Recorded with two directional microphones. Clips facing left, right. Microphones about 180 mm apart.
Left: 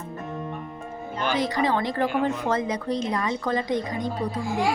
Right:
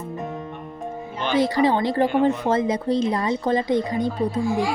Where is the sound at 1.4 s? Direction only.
30° right (ahead or behind).